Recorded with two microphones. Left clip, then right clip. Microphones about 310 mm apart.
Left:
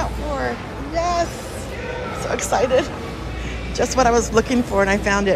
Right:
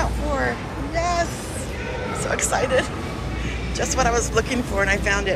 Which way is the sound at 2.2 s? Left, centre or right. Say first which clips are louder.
Left 3 dB; centre.